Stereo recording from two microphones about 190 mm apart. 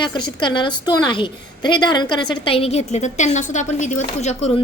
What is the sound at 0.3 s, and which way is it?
A woman's voice, 25° left (ahead or behind).